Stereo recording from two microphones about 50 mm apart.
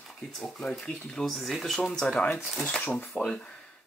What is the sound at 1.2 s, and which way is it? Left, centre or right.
Speech, centre.